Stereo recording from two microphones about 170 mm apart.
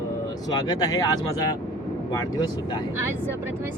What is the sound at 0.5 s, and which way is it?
Speech, 20° left (ahead or behind).